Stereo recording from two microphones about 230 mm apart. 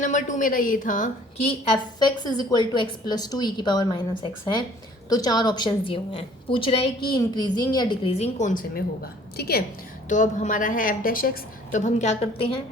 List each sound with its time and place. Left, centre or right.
0.0 s a woman's voice: left
2.0 s a woman's voice: centre